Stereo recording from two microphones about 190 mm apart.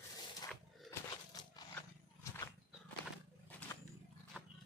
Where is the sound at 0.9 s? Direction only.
15° left (ahead or behind).